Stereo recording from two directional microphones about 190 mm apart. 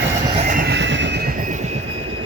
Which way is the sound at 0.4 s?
45° right (ahead or behind).